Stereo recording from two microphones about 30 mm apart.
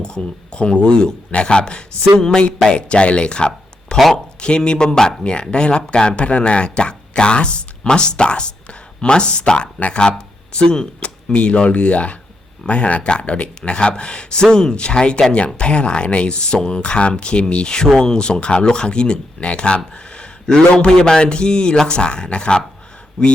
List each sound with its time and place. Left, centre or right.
0.0 s speech: left
2.1 s a man's voice: left
2.6 s speech: left
5.2 s speech: left
10.0 s a sound: left
11.3 s a man's voice: left